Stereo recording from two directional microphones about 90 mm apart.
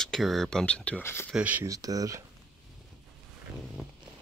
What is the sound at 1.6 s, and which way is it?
Speech, 40° right (ahead or behind).